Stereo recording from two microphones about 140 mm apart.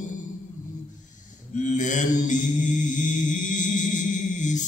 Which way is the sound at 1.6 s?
60° left (ahead or behind).